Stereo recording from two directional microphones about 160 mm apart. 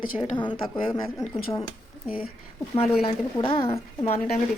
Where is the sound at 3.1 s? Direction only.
35° left (ahead or behind).